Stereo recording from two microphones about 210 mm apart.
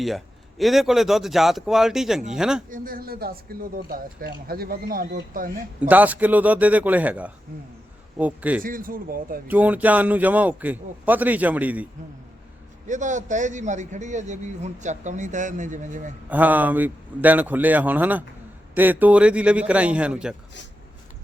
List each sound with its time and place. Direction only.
0.6 s speech: centre (ahead or behind)
2.6 s speech: 40° right (ahead or behind)
5.9 s a man's voice: 5° right (ahead or behind)
8.6 s speech: 40° right (ahead or behind)
9.5 s a man's voice: 10° right (ahead or behind)
12.9 s a man's voice: 35° right (ahead or behind)
16.3 s a man's voice: 10° right (ahead or behind)